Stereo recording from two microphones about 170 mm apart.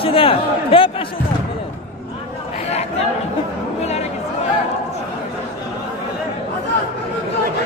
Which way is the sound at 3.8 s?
40° left (ahead or behind).